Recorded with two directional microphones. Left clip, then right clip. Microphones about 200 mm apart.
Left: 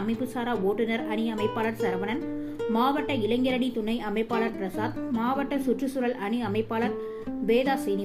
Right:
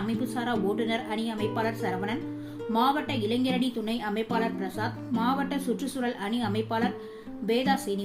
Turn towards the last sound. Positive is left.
turn(degrees=5)  # may be behind; listen again after turning